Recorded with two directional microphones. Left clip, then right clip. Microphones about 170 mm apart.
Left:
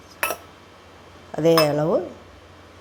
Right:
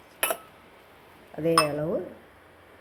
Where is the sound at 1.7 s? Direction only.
15° left (ahead or behind).